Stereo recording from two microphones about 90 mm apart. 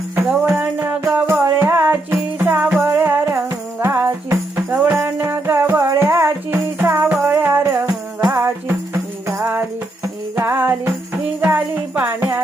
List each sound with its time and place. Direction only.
0.3 s music: 15° right (ahead or behind)
10.3 s music: 25° right (ahead or behind)
11.3 s jingle bell: 20° right (ahead or behind)